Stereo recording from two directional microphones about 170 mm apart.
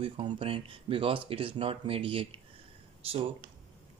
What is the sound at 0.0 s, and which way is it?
Speech, 30° right (ahead or behind).